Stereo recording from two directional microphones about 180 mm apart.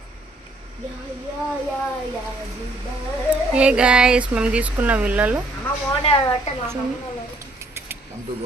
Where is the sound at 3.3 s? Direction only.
5° right (ahead or behind).